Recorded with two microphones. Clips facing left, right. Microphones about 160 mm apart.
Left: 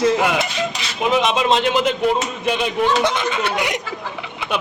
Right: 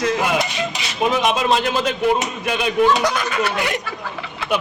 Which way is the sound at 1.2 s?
20° left (ahead or behind).